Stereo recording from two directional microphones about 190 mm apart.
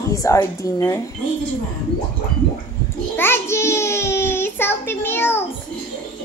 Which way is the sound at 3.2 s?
10° left (ahead or behind).